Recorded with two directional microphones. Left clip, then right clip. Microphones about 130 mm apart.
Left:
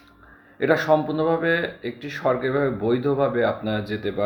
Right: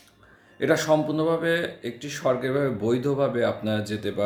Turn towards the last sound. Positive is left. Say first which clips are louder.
# left 2 dB
turn(degrees=-25)  # may be behind; listen again after turning